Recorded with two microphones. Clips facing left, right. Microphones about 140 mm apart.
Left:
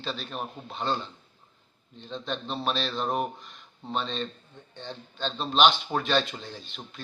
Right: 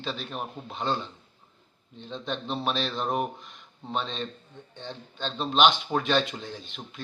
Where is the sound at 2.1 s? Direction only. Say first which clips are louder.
Right 1 dB; 15° right (ahead or behind).